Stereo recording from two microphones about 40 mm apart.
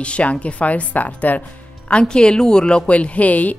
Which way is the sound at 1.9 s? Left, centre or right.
Left.